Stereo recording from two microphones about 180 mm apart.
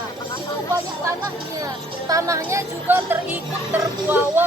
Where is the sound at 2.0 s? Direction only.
15° right (ahead or behind).